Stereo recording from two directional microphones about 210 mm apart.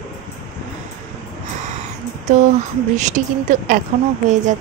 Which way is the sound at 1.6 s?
35° right (ahead or behind).